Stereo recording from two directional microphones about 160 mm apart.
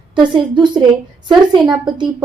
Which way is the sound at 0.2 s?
30° right (ahead or behind).